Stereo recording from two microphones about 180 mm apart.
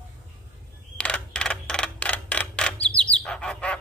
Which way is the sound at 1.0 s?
5° left (ahead or behind).